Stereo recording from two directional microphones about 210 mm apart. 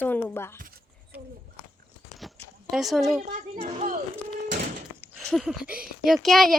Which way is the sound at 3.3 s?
40° right (ahead or behind).